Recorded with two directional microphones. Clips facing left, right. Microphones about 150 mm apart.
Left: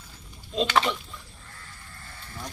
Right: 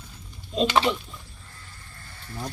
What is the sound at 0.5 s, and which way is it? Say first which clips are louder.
Speech: right 2 dB; 5° right (ahead or behind).